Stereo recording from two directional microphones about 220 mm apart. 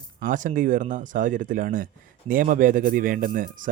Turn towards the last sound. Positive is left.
turn(degrees=-40)  # may be behind; listen again after turning